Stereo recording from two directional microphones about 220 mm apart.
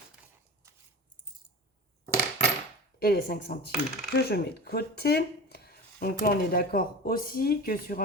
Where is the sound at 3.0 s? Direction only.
45° left (ahead or behind).